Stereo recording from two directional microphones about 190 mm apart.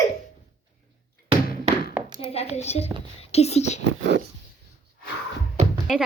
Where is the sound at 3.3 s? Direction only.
35° left (ahead or behind).